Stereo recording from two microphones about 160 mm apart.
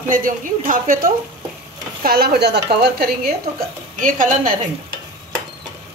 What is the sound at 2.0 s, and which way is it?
A woman's voice, 75° right (ahead or behind).